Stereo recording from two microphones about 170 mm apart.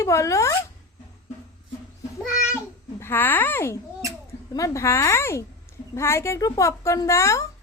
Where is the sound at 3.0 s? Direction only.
10° left (ahead or behind).